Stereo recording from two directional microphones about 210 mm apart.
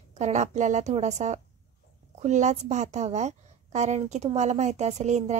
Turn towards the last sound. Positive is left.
turn(degrees=-30)  # may be behind; listen again after turning